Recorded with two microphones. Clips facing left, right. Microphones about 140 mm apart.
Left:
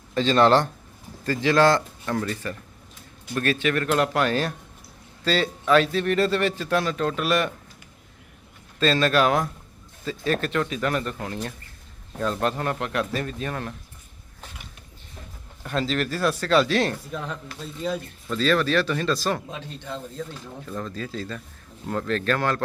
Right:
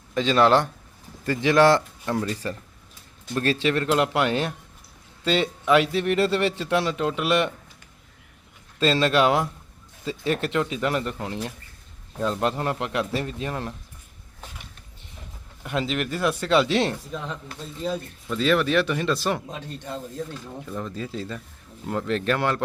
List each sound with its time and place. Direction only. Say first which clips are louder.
0.1 s speech: left 1 dB; 10° right (ahead or behind)
1.2 s a man's voice: right 1 dB; 20° right (ahead or behind)
3.3 s a man's voice: right 1 dB; 30° right (ahead or behind)
8.8 s a man's voice: even; 25° right (ahead or behind)
15.6 s a man's voice: left 1 dB; 15° right (ahead or behind)
17.1 s speech: left 1 dB; centre (ahead or behind); by 19.4 s 20° right (ahead or behind)
20.7 s a man's voice: even; 15° right (ahead or behind)